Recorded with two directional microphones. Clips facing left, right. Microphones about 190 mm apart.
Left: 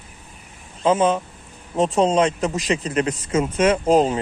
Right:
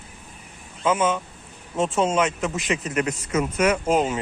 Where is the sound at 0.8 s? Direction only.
30° left (ahead or behind).